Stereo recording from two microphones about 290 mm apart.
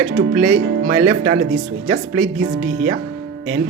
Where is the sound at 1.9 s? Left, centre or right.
Right.